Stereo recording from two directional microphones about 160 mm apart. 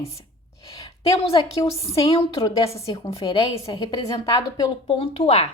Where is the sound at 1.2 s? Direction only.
35° left (ahead or behind).